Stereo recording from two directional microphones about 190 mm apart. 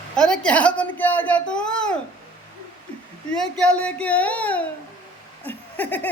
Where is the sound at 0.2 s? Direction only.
5° left (ahead or behind).